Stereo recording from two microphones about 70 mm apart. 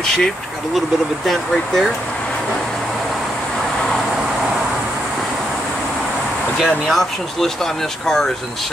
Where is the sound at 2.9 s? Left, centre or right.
Centre.